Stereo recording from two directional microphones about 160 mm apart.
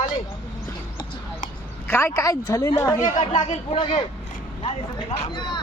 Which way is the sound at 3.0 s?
55° left (ahead or behind).